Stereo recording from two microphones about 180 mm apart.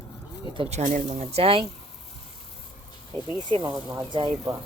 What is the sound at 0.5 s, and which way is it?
Speech, 35° right (ahead or behind).